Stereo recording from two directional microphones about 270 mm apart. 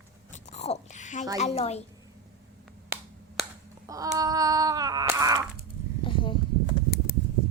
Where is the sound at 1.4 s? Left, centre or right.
Left.